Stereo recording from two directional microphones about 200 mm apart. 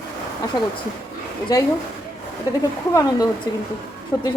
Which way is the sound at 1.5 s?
15° left (ahead or behind).